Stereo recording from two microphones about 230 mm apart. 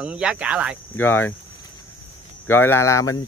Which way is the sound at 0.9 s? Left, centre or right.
Centre.